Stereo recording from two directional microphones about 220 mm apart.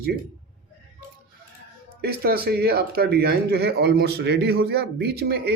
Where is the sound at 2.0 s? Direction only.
45° right (ahead or behind).